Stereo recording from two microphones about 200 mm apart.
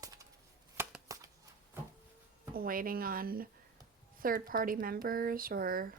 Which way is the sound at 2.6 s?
45° right (ahead or behind).